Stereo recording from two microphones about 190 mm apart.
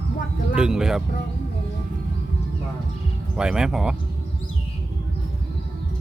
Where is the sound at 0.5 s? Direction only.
5° right (ahead or behind).